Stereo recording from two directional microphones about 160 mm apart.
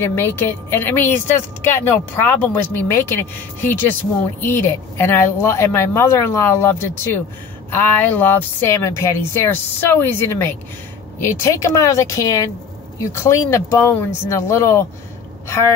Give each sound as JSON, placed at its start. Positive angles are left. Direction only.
{"t": 0.0, "sound": "a woman's voice", "side_deg": 15}